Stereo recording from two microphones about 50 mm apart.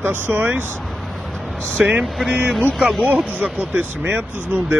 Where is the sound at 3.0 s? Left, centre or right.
Right.